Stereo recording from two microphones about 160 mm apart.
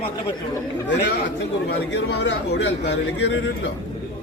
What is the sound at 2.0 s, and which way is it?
Speech, 90° left.